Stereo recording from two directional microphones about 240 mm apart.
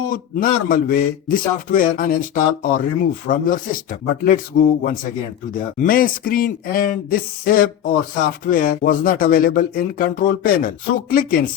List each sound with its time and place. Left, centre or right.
0.1 s a man's voice: left